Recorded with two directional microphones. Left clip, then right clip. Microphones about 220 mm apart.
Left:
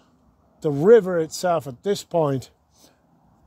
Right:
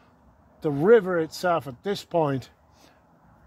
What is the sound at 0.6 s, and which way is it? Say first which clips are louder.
A man's voice: left 4 dB; 45° left (ahead or behind).